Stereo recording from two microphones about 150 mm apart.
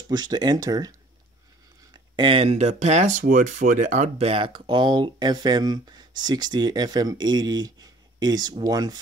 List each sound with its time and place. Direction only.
0.1 s speech: 25° right (ahead or behind)
2.1 s speech: 35° right (ahead or behind)